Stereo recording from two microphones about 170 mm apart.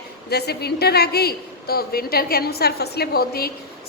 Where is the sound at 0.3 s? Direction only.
70° left (ahead or behind).